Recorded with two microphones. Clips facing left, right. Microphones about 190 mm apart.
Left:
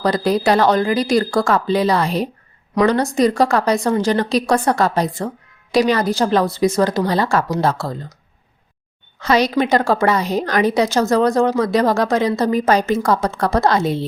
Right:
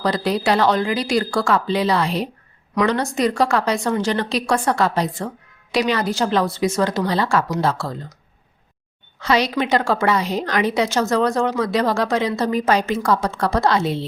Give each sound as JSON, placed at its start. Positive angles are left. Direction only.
{"t": 0.0, "sound": "a woman's voice", "side_deg": 45}
{"t": 9.2, "sound": "a woman's voice", "side_deg": 45}